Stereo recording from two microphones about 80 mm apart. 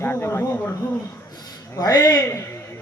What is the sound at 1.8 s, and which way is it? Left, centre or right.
Music, left.